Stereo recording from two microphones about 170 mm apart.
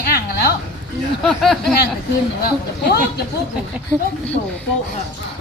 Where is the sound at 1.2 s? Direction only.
Centre (ahead or behind).